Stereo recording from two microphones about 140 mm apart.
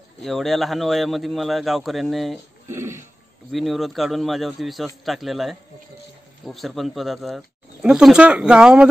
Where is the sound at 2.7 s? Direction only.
20° right (ahead or behind).